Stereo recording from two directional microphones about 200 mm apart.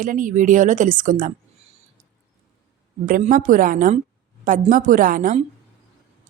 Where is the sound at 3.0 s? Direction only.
45° right (ahead or behind).